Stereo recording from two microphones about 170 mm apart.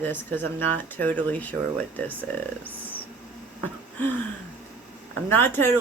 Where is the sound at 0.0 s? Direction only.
10° left (ahead or behind).